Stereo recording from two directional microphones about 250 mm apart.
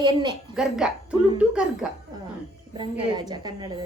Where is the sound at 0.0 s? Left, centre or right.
Centre.